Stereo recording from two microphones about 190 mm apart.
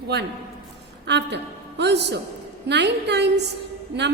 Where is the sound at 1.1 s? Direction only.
65° right (ahead or behind).